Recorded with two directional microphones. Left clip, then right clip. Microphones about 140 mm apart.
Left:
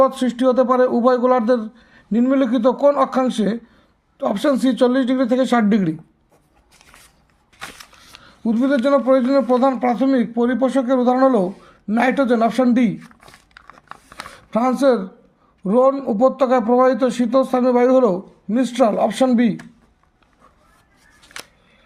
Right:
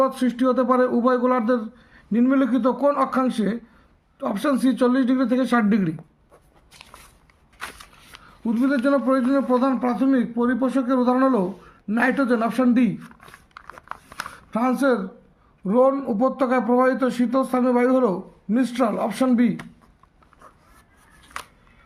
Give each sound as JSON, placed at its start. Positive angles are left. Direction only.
{"t": 0.0, "sound": "a man's voice", "side_deg": 35}
{"t": 8.2, "sound": "a man's voice", "side_deg": 45}
{"t": 14.5, "sound": "a man's voice", "side_deg": 40}
{"t": 21.3, "sound": "a sound", "side_deg": -5}